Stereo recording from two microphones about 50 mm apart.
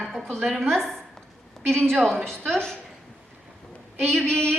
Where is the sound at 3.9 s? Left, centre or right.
Centre.